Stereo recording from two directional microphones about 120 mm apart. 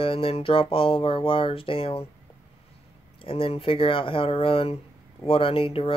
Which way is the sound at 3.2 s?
50° left (ahead or behind).